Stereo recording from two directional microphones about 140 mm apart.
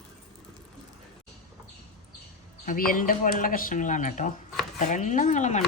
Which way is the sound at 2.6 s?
80° left.